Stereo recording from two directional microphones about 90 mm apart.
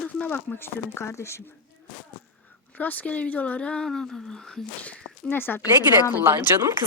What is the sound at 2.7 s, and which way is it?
Speech, 20° left (ahead or behind).